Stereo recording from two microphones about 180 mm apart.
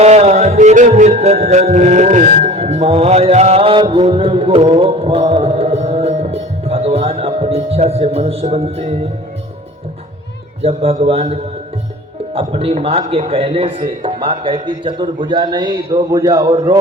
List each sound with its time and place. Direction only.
0.0 s music: 40° right (ahead or behind)
10.6 s music: 35° right (ahead or behind)
14.0 s speech: 30° right (ahead or behind)